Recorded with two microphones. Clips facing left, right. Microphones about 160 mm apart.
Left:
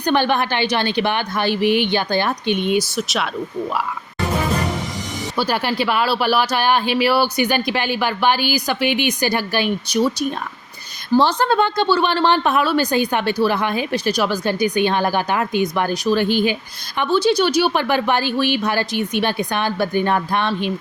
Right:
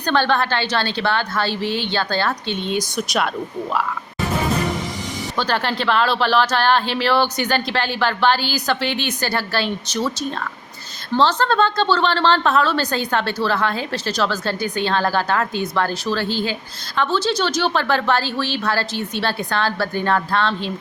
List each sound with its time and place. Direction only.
0.0 s a woman's voice: 15° left (ahead or behind)
5.4 s a woman's voice: 10° left (ahead or behind)